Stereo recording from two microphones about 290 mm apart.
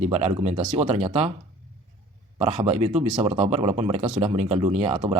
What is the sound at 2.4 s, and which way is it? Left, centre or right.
Speech, right.